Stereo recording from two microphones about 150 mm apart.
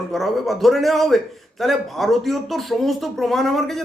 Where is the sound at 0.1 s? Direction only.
Centre (ahead or behind).